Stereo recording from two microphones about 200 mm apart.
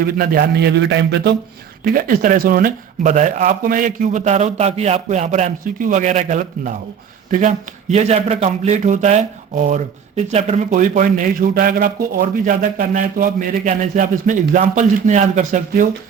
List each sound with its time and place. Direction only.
0.0 s a man's voice: 50° right (ahead or behind)
1.8 s speech: 45° right (ahead or behind)